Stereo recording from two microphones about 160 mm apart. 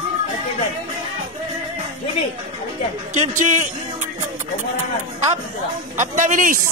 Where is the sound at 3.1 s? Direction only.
50° right (ahead or behind).